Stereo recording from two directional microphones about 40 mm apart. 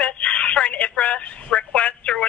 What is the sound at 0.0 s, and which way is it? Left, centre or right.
Telephone, left.